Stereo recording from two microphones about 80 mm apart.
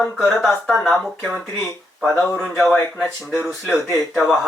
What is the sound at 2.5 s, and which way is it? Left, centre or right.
Speech, centre.